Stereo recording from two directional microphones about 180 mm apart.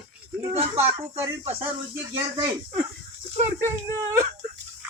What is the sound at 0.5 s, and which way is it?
Speech, 35° right (ahead or behind).